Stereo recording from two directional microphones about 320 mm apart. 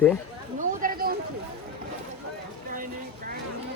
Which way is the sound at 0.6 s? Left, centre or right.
Right.